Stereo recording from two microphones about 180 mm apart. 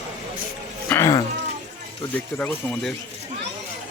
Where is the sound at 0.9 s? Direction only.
15° left (ahead or behind).